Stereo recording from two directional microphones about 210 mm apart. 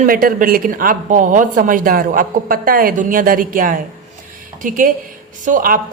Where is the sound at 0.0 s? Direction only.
40° right (ahead or behind).